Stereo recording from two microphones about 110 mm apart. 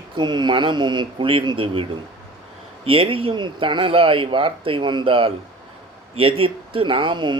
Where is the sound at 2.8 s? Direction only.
55° right (ahead or behind).